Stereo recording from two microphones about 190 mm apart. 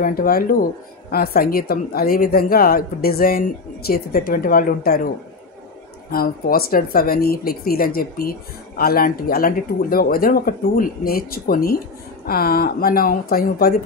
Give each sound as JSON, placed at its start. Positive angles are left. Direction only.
{"t": 0.0, "sound": "speech", "side_deg": 50}
{"t": 6.1, "sound": "speech", "side_deg": 50}